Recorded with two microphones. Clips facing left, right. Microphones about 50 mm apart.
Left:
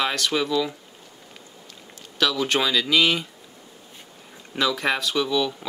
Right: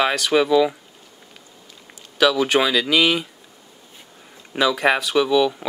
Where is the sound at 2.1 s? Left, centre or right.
Centre.